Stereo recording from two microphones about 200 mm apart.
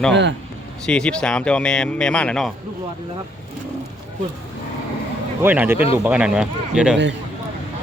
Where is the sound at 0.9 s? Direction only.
5° left (ahead or behind).